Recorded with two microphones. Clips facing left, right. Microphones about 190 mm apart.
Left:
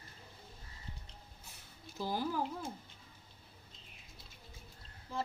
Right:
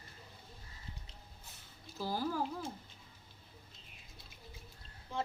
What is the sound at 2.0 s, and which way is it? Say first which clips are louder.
Speech: left 1 dB; 15° left (ahead or behind).